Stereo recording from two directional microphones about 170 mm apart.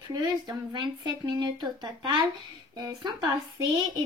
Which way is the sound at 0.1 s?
20° right (ahead or behind).